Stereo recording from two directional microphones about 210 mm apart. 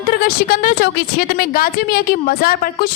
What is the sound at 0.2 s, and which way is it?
A woman's voice, 45° left (ahead or behind).